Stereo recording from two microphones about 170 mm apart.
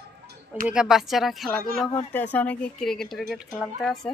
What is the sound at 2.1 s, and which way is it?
Speech, 10° left (ahead or behind).